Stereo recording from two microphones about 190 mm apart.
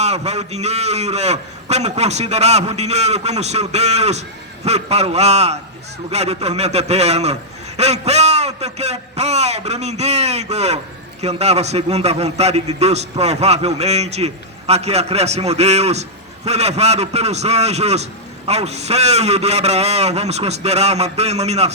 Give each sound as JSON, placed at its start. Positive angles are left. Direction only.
{"t": 0.0, "sound": "a man's voice", "side_deg": -35}